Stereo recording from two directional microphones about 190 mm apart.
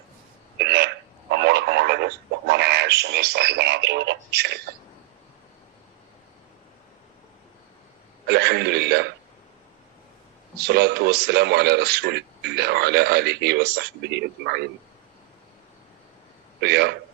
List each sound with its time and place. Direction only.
0.6 s telephone: 60° right (ahead or behind)
8.3 s a sound: 60° right (ahead or behind)
10.6 s a man's voice: 60° right (ahead or behind)
16.6 s a man's voice: 60° right (ahead or behind)